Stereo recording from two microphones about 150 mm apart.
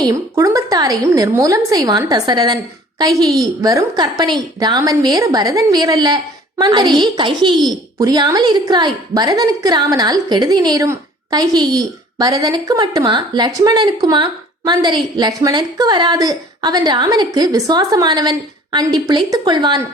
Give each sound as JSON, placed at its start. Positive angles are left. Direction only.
{"t": 0.0, "sound": "a woman's voice", "side_deg": -20}
{"t": 3.1, "sound": "a woman's voice", "side_deg": 0}
{"t": 3.6, "sound": "a woman's voice", "side_deg": -25}